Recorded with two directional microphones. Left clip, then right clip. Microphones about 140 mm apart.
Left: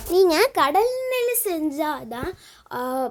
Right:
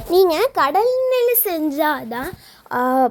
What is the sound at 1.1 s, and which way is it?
Speech, 35° right (ahead or behind).